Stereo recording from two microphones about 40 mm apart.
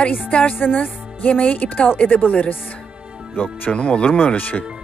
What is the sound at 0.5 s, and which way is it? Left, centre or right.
Speech, left.